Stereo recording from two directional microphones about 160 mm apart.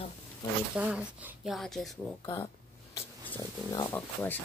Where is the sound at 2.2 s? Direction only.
20° left (ahead or behind).